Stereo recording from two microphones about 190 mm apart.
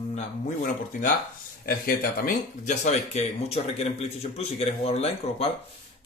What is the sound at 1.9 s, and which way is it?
A man's voice, 45° left (ahead or behind).